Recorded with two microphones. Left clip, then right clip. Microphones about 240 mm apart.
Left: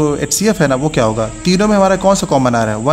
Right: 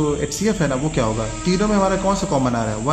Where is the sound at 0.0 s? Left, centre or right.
Left.